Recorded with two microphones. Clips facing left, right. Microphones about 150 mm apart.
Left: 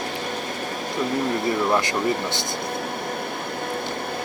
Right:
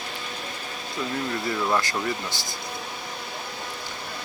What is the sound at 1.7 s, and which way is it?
Speech, 20° left (ahead or behind).